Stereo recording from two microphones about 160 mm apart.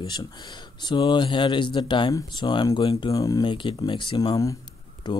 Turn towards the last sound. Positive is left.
turn(degrees=25)  # may be behind; listen again after turning